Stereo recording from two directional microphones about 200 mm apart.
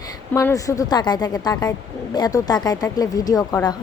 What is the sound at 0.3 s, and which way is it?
Speech, 15° left (ahead or behind).